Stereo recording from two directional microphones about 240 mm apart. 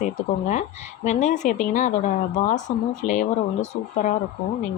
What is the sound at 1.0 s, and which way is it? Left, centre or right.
A woman's voice, left.